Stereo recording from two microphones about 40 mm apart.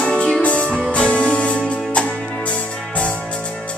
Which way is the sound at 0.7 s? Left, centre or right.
Centre.